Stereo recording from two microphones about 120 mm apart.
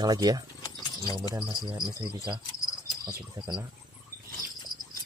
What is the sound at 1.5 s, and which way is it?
Speech, 40° right (ahead or behind).